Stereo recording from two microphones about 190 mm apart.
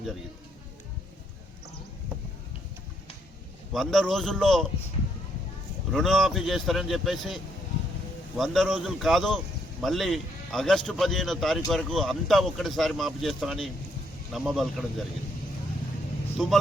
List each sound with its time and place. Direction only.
3.7 s speech: centre (ahead or behind)
5.9 s speech: centre (ahead or behind)
8.4 s speech: centre (ahead or behind)